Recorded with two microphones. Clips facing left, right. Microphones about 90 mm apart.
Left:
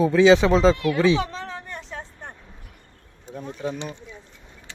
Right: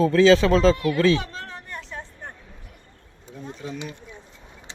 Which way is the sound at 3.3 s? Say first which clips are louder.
Left 3 dB; 50° left (ahead or behind).